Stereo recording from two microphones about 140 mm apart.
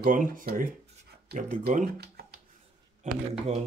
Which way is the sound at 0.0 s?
75° right (ahead or behind).